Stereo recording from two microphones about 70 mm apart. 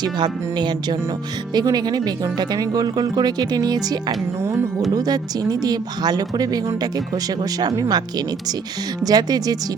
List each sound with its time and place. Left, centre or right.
0.0 s speech: right
1.5 s speech: right
4.9 s speech: right
9.0 s speech: right